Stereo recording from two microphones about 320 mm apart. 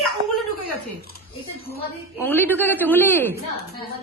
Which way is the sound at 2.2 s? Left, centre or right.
Centre.